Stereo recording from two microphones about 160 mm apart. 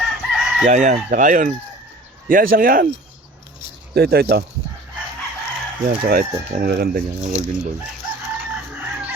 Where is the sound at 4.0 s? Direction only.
80° right.